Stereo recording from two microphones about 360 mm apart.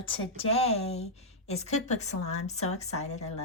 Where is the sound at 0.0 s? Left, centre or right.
Centre.